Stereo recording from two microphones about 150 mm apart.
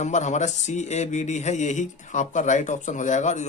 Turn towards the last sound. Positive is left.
turn(degrees=55)  # may be behind; listen again after turning